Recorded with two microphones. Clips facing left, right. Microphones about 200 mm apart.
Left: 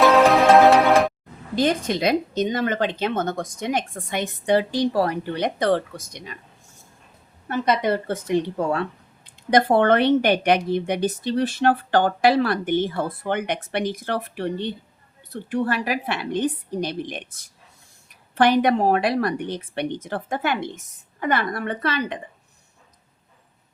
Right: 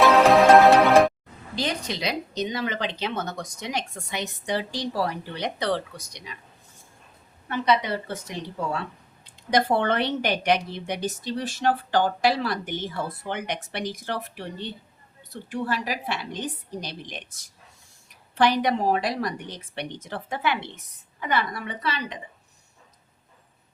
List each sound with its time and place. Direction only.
0.3 s music: centre (ahead or behind)
1.5 s speech: 50° left (ahead or behind)
7.4 s a woman's voice: 45° left (ahead or behind)